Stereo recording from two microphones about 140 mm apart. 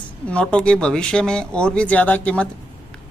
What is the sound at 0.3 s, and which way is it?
Speech, 10° left (ahead or behind).